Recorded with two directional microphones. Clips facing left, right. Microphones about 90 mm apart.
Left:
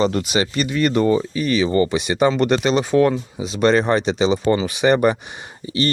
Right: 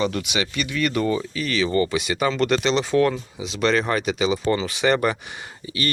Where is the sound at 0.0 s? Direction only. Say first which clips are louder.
Left 5 dB; 35° left (ahead or behind).